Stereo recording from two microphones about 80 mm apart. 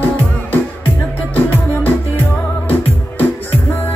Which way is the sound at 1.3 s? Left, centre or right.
Left.